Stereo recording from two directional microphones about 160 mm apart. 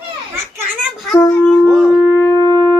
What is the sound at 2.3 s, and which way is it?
Shofar, 25° right (ahead or behind).